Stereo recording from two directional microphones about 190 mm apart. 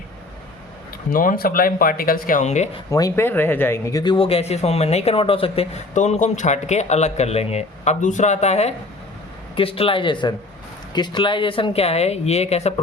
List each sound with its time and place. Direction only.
1.1 s speech: 45° left (ahead or behind)
2.9 s speech: 15° left (ahead or behind); by 12.7 s 35° left (ahead or behind)